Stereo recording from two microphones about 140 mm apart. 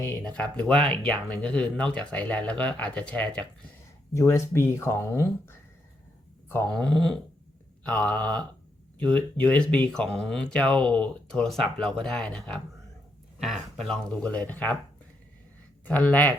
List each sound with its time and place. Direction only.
0.2 s speech: 5° left (ahead or behind)
4.1 s speech: 20° left (ahead or behind)
6.7 s speech: 5° left (ahead or behind)
15.9 s speech: 10° left (ahead or behind)